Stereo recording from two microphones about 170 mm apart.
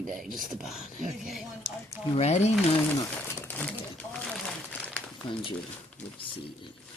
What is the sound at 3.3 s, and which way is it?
Speech, 10° left (ahead or behind).